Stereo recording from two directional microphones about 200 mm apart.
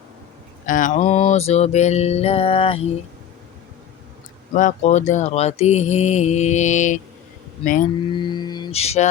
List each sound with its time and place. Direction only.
0.7 s speech: 40° left (ahead or behind)
4.5 s speech: 35° left (ahead or behind)
8.1 s music: 20° left (ahead or behind)